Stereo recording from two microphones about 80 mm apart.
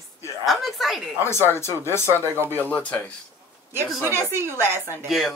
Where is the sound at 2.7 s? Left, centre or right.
Left.